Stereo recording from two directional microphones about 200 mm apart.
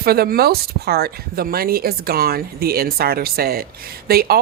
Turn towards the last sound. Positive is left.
turn(degrees=-50)  # may be behind; listen again after turning